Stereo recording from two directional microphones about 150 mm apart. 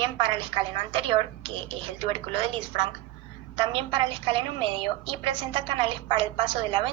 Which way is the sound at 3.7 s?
40° right (ahead or behind).